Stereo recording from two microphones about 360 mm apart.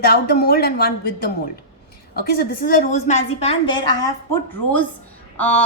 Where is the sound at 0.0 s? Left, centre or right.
Left.